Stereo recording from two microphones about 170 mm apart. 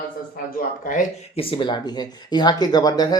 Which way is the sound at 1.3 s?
30° left (ahead or behind).